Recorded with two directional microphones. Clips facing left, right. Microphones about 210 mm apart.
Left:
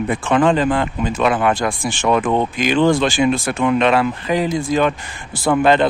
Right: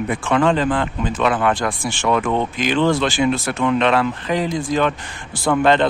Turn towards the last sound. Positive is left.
turn(degrees=10)  # may be behind; listen again after turning